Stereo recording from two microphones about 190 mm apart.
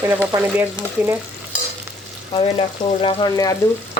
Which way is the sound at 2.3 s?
25° left (ahead or behind).